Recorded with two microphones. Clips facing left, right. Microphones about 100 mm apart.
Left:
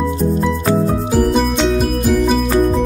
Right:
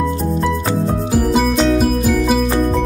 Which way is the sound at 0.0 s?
Centre (ahead or behind).